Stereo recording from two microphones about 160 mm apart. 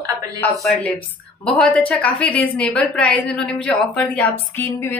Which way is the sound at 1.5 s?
10° left (ahead or behind).